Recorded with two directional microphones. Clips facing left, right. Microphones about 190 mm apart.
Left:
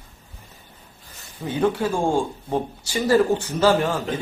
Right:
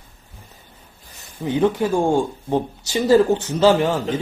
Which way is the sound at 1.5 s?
15° right (ahead or behind).